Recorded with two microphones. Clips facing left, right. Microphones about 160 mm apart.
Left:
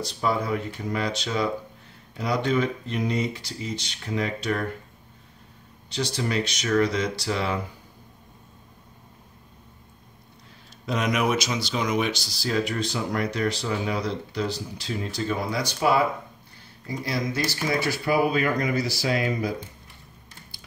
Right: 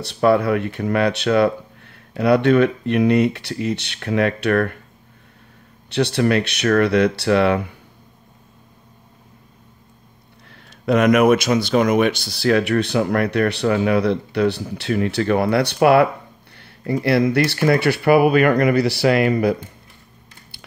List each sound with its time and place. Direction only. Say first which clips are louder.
0.0 s speech: right 10 dB; 65° right (ahead or behind)
5.9 s speech: right 10 dB; 65° right (ahead or behind)
10.5 s speech: right 11 dB; 65° right (ahead or behind)